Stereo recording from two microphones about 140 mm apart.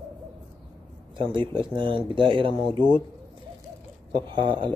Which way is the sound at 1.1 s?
35° right (ahead or behind).